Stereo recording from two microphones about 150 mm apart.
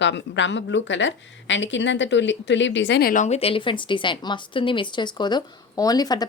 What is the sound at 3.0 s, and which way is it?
Speech, 65° left (ahead or behind).